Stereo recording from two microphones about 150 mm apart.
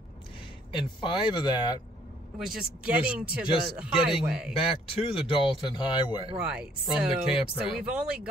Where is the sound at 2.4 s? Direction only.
5° right (ahead or behind).